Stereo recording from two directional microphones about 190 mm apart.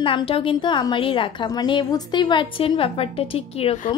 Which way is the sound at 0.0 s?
25° left (ahead or behind).